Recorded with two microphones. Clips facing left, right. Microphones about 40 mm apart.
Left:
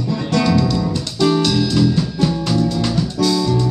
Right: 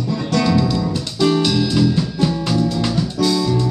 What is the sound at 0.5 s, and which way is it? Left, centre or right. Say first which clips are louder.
Music: left 1 dB; centre.